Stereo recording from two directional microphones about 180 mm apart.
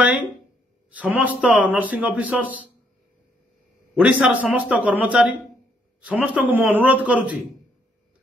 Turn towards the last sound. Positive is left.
turn(degrees=-10)  # may be behind; listen again after turning